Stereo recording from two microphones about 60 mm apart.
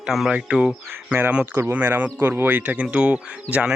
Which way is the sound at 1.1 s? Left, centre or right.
Right.